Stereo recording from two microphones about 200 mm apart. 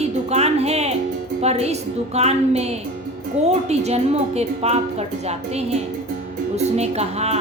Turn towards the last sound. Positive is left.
turn(degrees=-30)  # may be behind; listen again after turning